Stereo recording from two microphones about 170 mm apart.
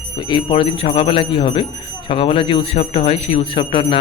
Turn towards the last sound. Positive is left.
turn(degrees=30)  # may be behind; listen again after turning